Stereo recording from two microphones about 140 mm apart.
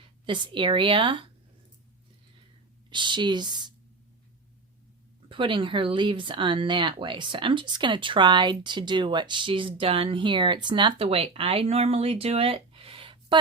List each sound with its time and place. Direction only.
0.0 s a woman's voice: 35° right (ahead or behind)
2.9 s speech: 35° right (ahead or behind)
5.3 s speech: 35° right (ahead or behind)